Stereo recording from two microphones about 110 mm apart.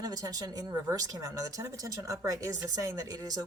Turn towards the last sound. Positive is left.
turn(degrees=-35)  # may be behind; listen again after turning